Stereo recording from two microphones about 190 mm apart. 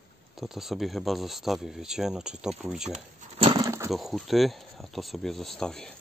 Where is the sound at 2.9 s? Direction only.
35° right (ahead or behind).